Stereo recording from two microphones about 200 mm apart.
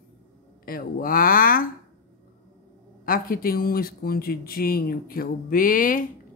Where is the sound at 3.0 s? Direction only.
45° left (ahead or behind).